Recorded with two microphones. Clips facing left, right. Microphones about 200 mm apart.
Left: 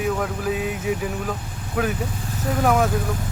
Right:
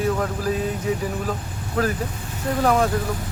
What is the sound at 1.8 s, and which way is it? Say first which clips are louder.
Speech: right 1 dB; 10° left (ahead or behind).